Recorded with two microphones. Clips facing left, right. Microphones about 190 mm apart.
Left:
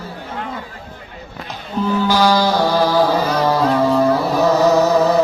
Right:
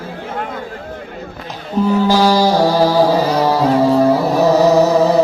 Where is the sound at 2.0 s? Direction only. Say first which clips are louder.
Even; 40° right (ahead or behind).